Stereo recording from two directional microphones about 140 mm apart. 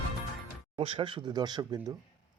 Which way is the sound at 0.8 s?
40° right (ahead or behind).